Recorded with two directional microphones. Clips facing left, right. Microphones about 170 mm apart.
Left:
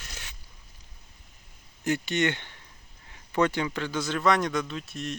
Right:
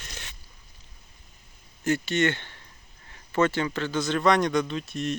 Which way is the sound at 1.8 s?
15° left (ahead or behind).